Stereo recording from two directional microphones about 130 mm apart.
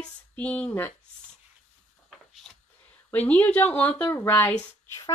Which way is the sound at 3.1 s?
10° left (ahead or behind).